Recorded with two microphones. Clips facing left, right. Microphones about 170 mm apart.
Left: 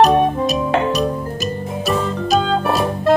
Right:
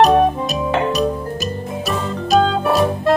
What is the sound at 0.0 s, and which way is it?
Music, centre (ahead or behind).